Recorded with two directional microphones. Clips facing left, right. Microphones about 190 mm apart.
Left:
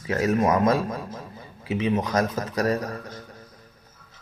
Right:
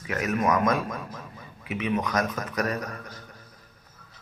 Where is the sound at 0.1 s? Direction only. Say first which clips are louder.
Left 4 dB; 30° left (ahead or behind).